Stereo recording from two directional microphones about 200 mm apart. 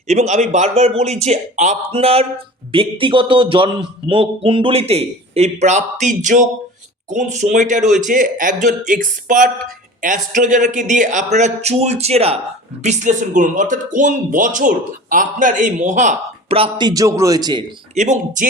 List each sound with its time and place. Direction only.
0.1 s a man's voice: 35° right (ahead or behind)
17.9 s speech: 35° right (ahead or behind)